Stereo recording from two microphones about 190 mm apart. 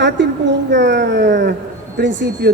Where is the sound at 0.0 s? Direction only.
70° right (ahead or behind).